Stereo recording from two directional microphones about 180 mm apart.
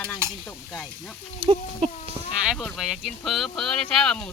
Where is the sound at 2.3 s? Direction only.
Centre (ahead or behind).